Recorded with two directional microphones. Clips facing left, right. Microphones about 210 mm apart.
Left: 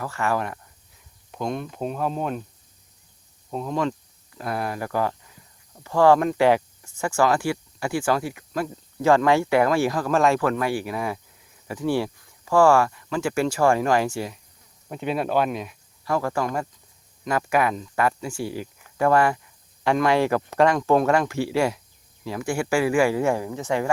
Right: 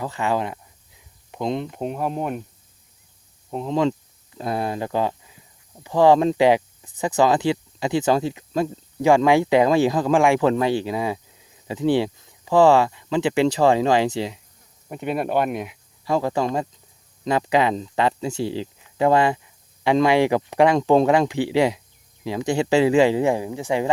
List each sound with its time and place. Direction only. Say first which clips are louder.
0.0 s speech: right 2 dB; 20° right (ahead or behind)
3.5 s speech: right 4 dB; 20° right (ahead or behind)
14.8 s speech: right 1 dB; 5° right (ahead or behind)
15.6 s speech: right 3 dB; 15° right (ahead or behind)